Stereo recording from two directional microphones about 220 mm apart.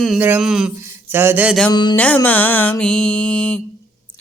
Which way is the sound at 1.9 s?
5° left (ahead or behind).